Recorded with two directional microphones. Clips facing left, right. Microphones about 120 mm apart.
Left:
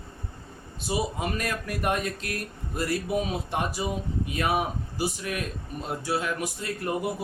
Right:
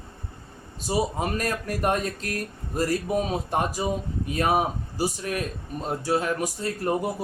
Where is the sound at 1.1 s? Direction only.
40° right (ahead or behind).